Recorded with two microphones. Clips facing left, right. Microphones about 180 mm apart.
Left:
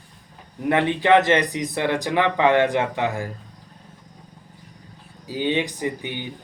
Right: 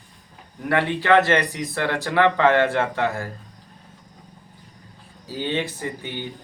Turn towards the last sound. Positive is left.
turn(degrees=15)  # may be behind; listen again after turning